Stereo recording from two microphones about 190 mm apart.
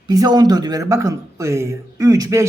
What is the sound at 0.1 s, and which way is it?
Speech, 20° right (ahead or behind).